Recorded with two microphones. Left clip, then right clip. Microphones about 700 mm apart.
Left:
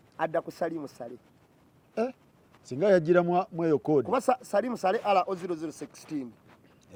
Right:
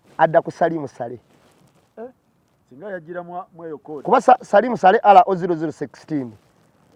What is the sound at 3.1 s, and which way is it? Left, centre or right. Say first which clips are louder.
Speech: left 7 dB; left.